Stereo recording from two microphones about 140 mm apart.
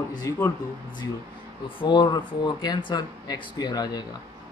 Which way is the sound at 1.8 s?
30° left (ahead or behind).